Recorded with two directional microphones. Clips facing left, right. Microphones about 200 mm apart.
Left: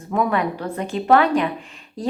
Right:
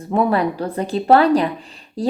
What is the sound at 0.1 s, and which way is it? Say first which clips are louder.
A woman's voice: right 3 dB; 30° right (ahead or behind).